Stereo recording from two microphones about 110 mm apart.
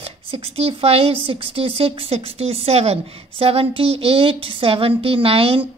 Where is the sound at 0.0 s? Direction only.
60° right (ahead or behind).